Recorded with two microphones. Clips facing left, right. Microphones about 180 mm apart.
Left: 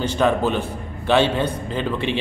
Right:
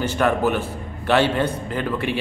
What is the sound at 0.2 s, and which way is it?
Speech, 5° right (ahead or behind).